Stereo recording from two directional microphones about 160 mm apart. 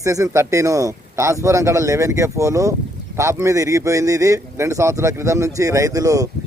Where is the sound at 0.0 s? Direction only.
20° right (ahead or behind).